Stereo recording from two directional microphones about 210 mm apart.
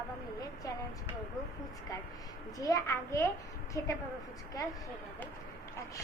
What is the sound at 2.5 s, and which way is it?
A woman's voice, 15° left (ahead or behind).